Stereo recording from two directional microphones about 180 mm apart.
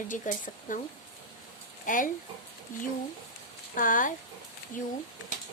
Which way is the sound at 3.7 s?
50° left (ahead or behind).